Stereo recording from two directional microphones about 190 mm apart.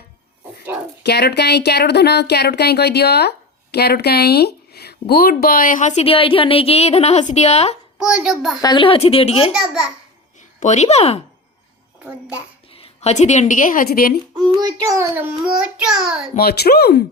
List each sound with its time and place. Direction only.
1.0 s speech: 60° left (ahead or behind); by 7.8 s 35° left (ahead or behind)
7.9 s a child's voice: 5° right (ahead or behind)
8.6 s a woman's voice: 25° left (ahead or behind)
10.6 s a woman's voice: 40° left (ahead or behind)
12.7 s a woman's voice: 30° left (ahead or behind); by 14.2 s 50° left (ahead or behind)
14.8 s a child's voice: 15° right (ahead or behind)
16.3 s speech: 55° left (ahead or behind)